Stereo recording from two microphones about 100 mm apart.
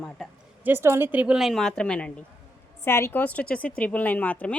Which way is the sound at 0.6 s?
25° right (ahead or behind).